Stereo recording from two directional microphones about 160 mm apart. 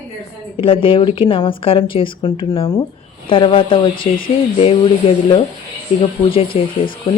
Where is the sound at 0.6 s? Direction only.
35° left (ahead or behind).